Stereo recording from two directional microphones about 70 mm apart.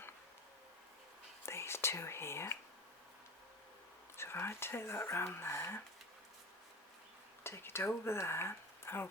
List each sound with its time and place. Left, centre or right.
1.5 s whispering: left
4.2 s speech: left
7.4 s speech: left